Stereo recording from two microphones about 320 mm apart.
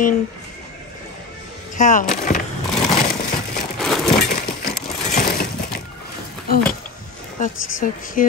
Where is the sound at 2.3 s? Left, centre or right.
Left.